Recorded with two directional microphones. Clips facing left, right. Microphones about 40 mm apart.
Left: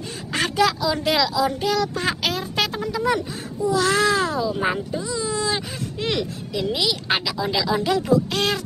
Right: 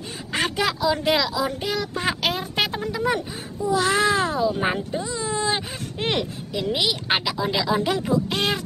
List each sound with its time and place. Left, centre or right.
0.3 s speech: centre
2.9 s a sound: right
3.6 s speech: right
5.0 s whimper: right
6.5 s speech: right